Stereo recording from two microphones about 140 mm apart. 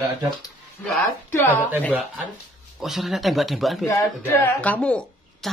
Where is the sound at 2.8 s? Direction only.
Centre (ahead or behind).